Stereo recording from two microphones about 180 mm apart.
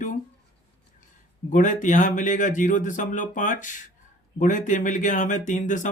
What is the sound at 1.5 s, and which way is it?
Speech, 45° left (ahead or behind).